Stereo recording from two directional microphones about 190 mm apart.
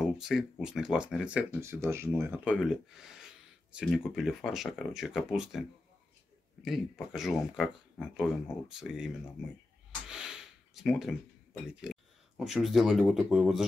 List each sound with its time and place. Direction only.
0.0 s speech: centre (ahead or behind)
10.0 s gasp: 5° right (ahead or behind)
11.7 s speech: 5° right (ahead or behind)